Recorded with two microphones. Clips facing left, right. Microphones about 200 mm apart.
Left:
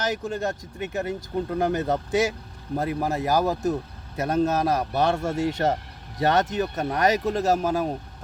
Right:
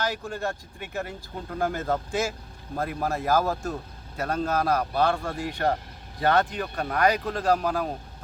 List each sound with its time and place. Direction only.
0.0 s speech: 20° left (ahead or behind)